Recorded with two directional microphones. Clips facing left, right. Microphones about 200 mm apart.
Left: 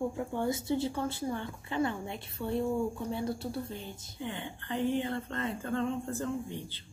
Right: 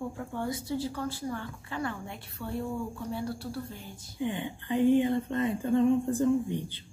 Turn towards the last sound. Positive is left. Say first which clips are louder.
# right 8 dB
turn(degrees=-15)  # may be behind; listen again after turning